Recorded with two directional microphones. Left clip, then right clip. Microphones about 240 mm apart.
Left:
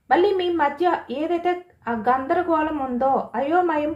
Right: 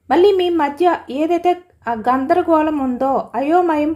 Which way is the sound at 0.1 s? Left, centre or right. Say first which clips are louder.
Right 6 dB; right.